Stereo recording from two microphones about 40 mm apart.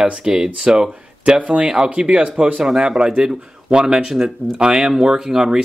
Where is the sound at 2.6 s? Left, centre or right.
Centre.